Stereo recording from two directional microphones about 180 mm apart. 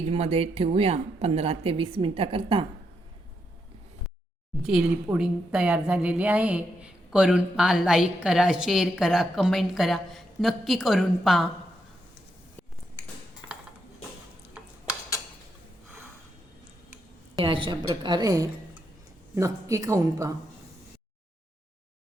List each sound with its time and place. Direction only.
0.1 s a woman's voice: 35° right (ahead or behind)
4.6 s a woman's voice: 5° right (ahead or behind)
17.4 s a woman's voice: 30° right (ahead or behind)